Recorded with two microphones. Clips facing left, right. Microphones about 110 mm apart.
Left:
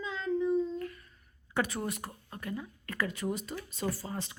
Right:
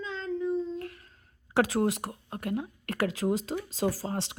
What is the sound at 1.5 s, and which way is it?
Speech, 90° right.